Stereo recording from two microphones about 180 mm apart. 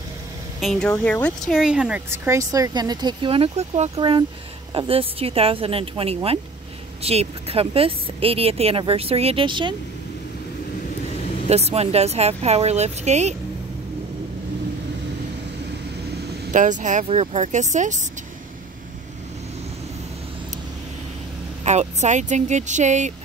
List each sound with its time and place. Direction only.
0.6 s speech: 5° left (ahead or behind); by 3.9 s 35° right (ahead or behind)
3.9 s speech: 25° right (ahead or behind)
11.4 s speech: 35° right (ahead or behind)
16.5 s speech: 45° right (ahead or behind)
21.6 s speech: 40° right (ahead or behind)